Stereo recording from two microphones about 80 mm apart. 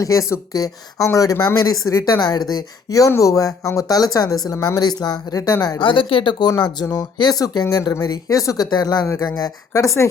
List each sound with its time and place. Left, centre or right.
0.0 s speech: left
5.8 s speech: left
7.2 s speech: left
9.7 s speech: left